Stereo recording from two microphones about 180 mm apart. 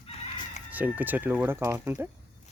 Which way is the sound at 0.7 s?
10° right (ahead or behind).